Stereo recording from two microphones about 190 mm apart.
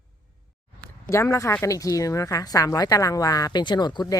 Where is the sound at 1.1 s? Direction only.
15° left (ahead or behind).